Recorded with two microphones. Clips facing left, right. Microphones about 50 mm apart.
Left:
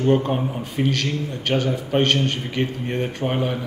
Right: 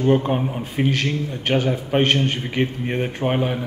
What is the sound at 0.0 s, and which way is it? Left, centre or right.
A man's voice, centre.